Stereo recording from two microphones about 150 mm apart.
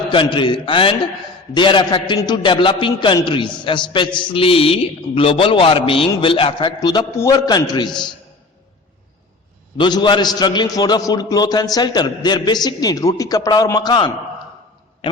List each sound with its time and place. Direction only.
0.1 s a man's voice: 35° left (ahead or behind)
9.7 s a man's voice: 30° left (ahead or behind)